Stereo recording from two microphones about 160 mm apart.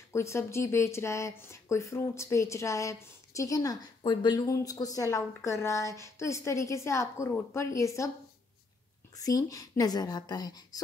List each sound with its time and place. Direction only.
0.1 s speech: 15° left (ahead or behind)
9.1 s speech: 20° left (ahead or behind)